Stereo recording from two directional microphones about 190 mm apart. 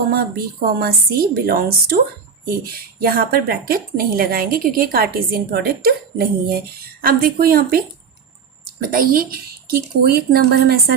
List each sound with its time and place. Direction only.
0.1 s speech: 55° right (ahead or behind)
8.9 s speech: 50° right (ahead or behind)